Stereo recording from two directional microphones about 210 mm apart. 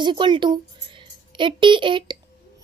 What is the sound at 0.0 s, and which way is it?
A child's voice, 20° right (ahead or behind).